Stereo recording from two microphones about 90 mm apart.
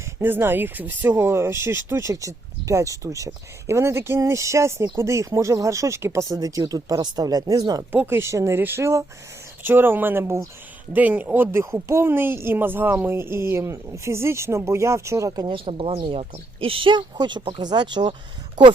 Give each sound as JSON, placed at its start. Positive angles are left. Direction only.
{"t": 0.2, "sound": "speech", "side_deg": -25}
{"t": 6.3, "sound": "speech", "side_deg": -45}
{"t": 8.1, "sound": "speech", "side_deg": -30}
{"t": 10.9, "sound": "speech", "side_deg": -20}
{"t": 11.6, "sound": "speech", "side_deg": -30}
{"t": 15.4, "sound": "speech", "side_deg": -75}